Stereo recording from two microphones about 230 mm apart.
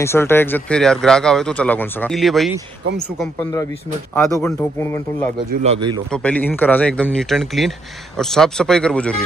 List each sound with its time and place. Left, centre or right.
0.0 s speech: centre
4.1 s speech: centre
5.5 s a man's voice: right
6.1 s speech: centre